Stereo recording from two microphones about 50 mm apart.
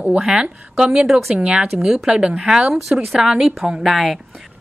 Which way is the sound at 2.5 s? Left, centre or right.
Centre.